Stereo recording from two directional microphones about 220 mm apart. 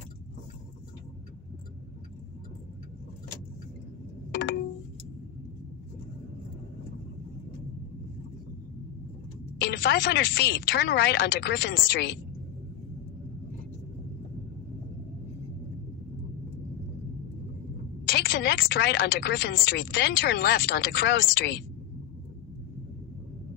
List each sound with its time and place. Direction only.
9.6 s speech: 50° left (ahead or behind)
18.1 s speech: 45° left (ahead or behind)